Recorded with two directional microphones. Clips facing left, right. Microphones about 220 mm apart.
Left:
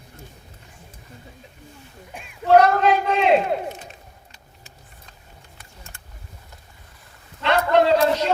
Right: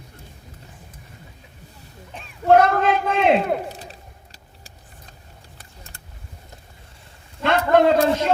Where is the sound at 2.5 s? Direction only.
50° right (ahead or behind).